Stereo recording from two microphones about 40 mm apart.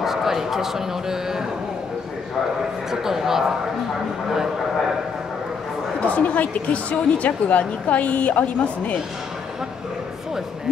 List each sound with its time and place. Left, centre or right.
0.0 s a man's voice: centre
2.9 s speech: centre
5.9 s a woman's voice: left